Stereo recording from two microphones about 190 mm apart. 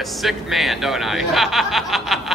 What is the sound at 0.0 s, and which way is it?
Speech, centre (ahead or behind).